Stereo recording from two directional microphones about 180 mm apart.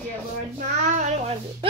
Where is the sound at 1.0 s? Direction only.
35° right (ahead or behind).